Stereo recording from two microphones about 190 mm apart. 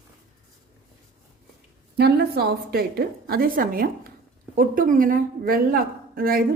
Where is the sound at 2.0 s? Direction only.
60° right (ahead or behind).